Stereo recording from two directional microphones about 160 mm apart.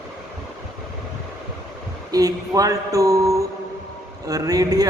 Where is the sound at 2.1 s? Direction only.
20° right (ahead or behind).